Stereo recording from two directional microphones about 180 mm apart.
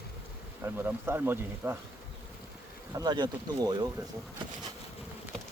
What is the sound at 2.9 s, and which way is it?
Speech, 20° right (ahead or behind).